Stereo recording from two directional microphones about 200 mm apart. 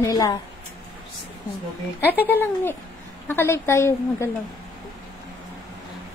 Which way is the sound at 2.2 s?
10° left (ahead or behind).